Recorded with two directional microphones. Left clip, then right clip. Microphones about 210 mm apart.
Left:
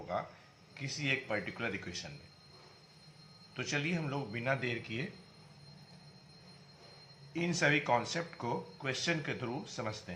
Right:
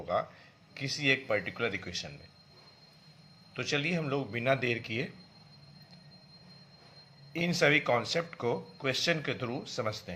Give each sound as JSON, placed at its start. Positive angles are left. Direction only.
{"t": 0.1, "sound": "speech", "side_deg": -45}
{"t": 3.5, "sound": "speech", "side_deg": -40}
{"t": 7.3, "sound": "speech", "side_deg": -45}